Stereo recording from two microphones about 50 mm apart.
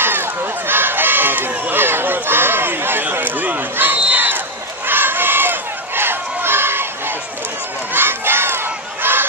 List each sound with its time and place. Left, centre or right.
0.0 s run: right
4.8 s a sound: right
7.9 s crowd: right